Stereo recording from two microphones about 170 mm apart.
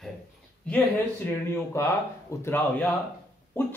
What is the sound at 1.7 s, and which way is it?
Speech, 15° left (ahead or behind).